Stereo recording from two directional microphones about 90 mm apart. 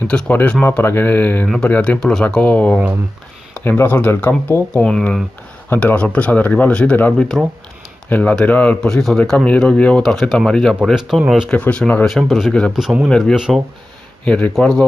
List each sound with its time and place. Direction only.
0.1 s speech: 15° left (ahead or behind)
2.0 s speech: 5° left (ahead or behind)
2.2 s speech: 15° left (ahead or behind)
4.8 s speech: 10° left (ahead or behind)
11.5 s speech: 15° left (ahead or behind)
12.1 s speech: centre (ahead or behind)
14.2 s speech: 15° left (ahead or behind)